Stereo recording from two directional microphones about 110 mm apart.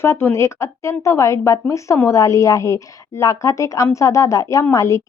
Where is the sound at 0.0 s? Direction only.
25° left (ahead or behind).